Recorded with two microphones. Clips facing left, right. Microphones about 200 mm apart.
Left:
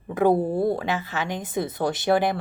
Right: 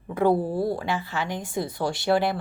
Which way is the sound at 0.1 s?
20° left (ahead or behind).